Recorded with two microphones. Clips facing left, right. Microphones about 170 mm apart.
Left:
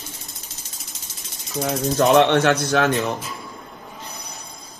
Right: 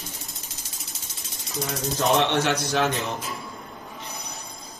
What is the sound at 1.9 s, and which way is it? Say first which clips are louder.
Speech: left 7 dB; 70° left (ahead or behind).